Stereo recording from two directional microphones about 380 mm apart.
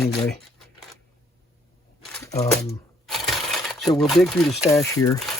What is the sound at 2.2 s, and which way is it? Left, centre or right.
Speech, centre.